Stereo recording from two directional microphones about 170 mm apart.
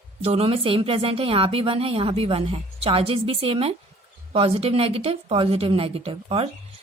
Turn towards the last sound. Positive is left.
turn(degrees=-35)  # may be behind; listen again after turning